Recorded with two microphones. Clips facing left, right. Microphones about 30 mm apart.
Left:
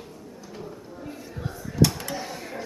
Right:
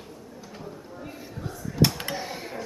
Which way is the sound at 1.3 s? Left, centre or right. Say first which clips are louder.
Right 1 dB; centre.